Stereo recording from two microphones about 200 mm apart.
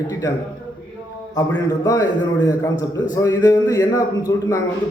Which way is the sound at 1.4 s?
15° left (ahead or behind).